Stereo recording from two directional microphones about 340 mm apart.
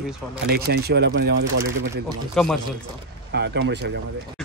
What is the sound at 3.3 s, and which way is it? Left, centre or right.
Speech, right.